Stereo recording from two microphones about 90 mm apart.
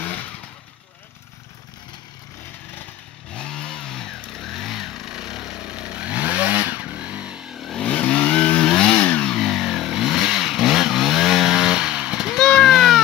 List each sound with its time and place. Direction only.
3.3 s chainsaw: 10° left (ahead or behind)
7.8 s chainsaw: 15° left (ahead or behind)
8.9 s vehicle: 20° left (ahead or behind)
9.3 s vehicle: centre (ahead or behind)
12.4 s a sound: 5° left (ahead or behind)